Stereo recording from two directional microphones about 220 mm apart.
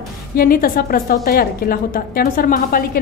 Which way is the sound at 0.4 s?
40° left (ahead or behind).